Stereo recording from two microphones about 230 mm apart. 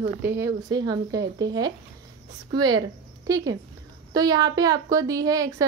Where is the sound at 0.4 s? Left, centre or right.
Centre.